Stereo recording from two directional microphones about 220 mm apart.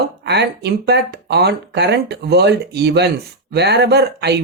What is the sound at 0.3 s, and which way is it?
Speech, 50° right (ahead or behind).